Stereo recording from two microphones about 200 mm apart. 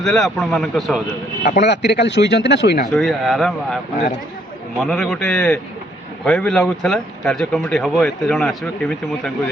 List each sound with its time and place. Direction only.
0.0 s speech: centre (ahead or behind)
1.5 s speech: 55° left (ahead or behind)
2.9 s speech: centre (ahead or behind)
4.8 s speech: centre (ahead or behind)